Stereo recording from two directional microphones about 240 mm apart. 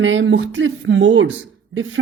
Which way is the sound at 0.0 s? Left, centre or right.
Right.